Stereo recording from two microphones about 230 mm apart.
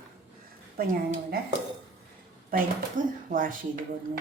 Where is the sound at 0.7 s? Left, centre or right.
Right.